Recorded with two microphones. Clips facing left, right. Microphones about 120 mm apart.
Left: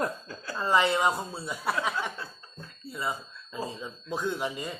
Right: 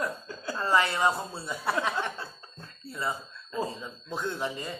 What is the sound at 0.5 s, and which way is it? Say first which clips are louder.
Speech: left 2 dB; 15° left (ahead or behind).